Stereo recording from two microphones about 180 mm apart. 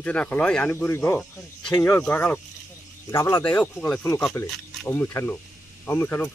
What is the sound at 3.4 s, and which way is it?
Speech, 5° left (ahead or behind).